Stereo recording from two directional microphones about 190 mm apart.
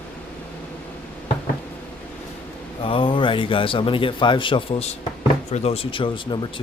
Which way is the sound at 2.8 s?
30° left (ahead or behind).